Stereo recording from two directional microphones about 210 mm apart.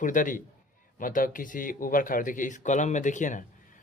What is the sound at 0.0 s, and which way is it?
Speech, 40° left (ahead or behind).